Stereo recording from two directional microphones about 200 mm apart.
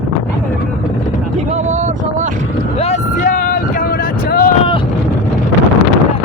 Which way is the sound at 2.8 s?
35° left (ahead or behind).